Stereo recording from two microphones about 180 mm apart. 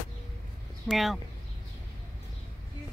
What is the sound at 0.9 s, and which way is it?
Speech, centre (ahead or behind).